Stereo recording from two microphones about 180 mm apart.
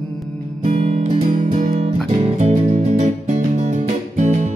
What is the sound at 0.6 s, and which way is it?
Music, 40° right (ahead or behind).